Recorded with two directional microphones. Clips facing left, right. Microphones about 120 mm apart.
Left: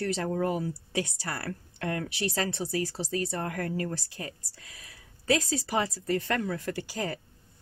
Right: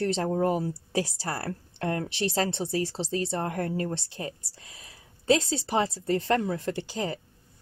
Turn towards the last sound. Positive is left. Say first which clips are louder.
# right 2 dB
turn(degrees=-25)  # may be behind; listen again after turning